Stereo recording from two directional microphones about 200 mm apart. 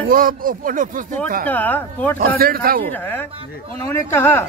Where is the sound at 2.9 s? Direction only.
10° left (ahead or behind).